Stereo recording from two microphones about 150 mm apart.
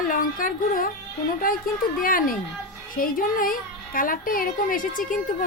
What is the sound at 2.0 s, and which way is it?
Speech, 70° left (ahead or behind).